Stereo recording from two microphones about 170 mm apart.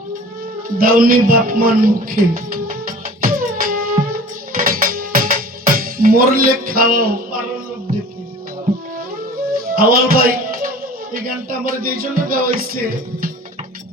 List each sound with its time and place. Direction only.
0.8 s music: 55° right (ahead or behind)
9.6 s speech: 60° right (ahead or behind)